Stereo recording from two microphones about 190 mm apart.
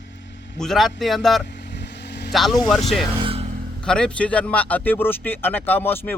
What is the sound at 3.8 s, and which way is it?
Speech, 5° left (ahead or behind).